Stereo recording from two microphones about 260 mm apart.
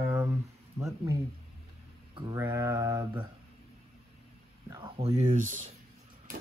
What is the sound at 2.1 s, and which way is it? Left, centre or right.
Mantra, centre.